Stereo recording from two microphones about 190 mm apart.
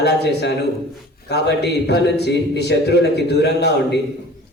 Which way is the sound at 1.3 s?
60° left (ahead or behind).